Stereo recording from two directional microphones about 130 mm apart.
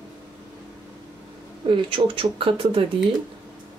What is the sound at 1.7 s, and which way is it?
Speech, 40° right (ahead or behind).